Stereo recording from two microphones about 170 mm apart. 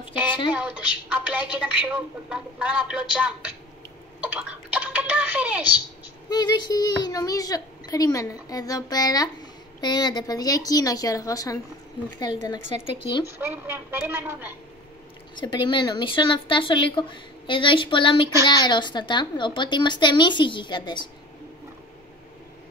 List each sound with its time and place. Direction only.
0.5 s a woman's voice: 5° right (ahead or behind)
4.3 s a sound: 5° right (ahead or behind)
6.2 s a woman's voice: 25° left (ahead or behind)
13.0 s a woman's voice: 25° left (ahead or behind)
13.4 s a woman's voice: 10° right (ahead or behind)
15.4 s a woman's voice: 25° left (ahead or behind)